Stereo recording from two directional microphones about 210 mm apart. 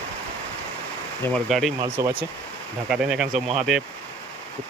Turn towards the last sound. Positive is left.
turn(degrees=0)  # may be behind; listen again after turning